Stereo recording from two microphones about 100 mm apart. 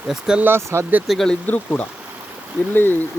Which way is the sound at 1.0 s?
Centre (ahead or behind).